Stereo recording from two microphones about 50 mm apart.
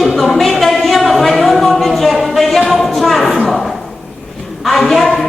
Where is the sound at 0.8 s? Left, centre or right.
Centre.